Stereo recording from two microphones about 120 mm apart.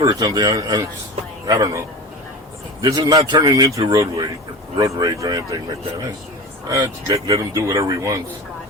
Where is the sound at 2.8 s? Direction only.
35° right (ahead or behind).